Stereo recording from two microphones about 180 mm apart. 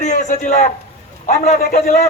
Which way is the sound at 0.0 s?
40° left (ahead or behind).